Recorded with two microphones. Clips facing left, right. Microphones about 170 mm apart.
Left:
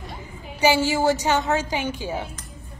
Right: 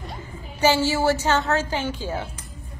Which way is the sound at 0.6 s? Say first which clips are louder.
Even; 15° left (ahead or behind).